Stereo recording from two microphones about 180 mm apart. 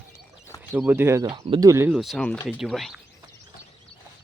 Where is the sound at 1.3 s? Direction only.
25° right (ahead or behind).